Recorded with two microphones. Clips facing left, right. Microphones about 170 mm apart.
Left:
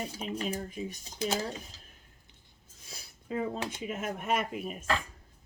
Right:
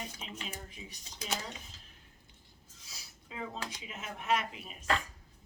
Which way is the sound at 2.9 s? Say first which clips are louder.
Left 13 dB; 50° left (ahead or behind).